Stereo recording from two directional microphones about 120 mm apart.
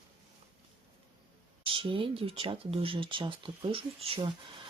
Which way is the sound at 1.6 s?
45° right (ahead or behind).